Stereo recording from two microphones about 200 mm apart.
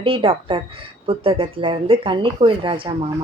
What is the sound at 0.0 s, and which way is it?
A woman's voice, 25° right (ahead or behind).